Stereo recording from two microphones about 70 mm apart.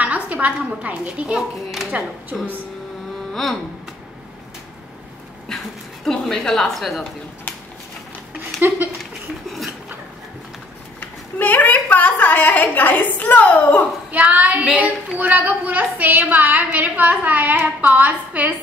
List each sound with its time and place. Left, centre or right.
0.0 s a woman's voice: right
5.5 s a woman's voice: centre
8.5 s speech: right
11.0 s a woman's voice: left
14.1 s a woman's voice: right